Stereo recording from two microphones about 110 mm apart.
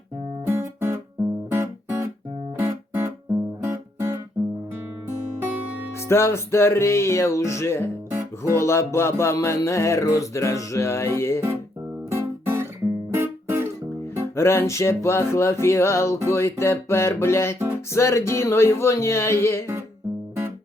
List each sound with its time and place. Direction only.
0.4 s music: 20° right (ahead or behind)
1.5 s guitar: 20° right (ahead or behind)
5.4 s music: 15° right (ahead or behind)
6.1 s music: 25° left (ahead or behind)
12.1 s guitar: 20° right (ahead or behind)
13.1 s music: 20° right (ahead or behind)
14.2 s music: 25° left (ahead or behind)